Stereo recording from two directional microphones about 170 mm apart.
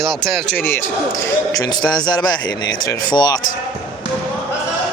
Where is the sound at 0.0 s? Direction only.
5° left (ahead or behind); by 3.3 s 25° left (ahead or behind).